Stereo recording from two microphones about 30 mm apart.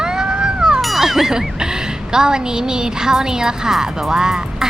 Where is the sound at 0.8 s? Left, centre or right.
Centre.